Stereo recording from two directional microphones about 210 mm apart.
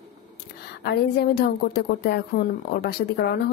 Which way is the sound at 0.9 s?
50° left (ahead or behind).